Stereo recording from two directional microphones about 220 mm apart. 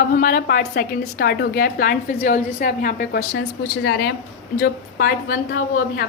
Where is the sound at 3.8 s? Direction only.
50° left (ahead or behind).